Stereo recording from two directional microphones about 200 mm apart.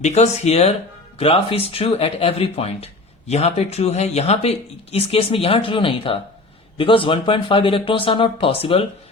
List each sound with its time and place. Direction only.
0.0 s speech: 35° left (ahead or behind)